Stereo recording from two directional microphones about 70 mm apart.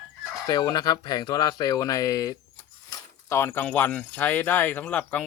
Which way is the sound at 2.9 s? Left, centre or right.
Left.